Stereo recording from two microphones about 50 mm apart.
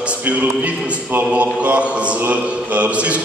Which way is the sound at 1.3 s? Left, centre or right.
Right.